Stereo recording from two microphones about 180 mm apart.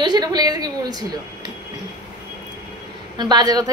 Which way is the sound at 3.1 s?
25° right (ahead or behind).